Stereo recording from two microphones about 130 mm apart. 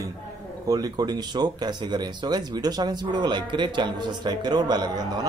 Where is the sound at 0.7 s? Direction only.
30° right (ahead or behind).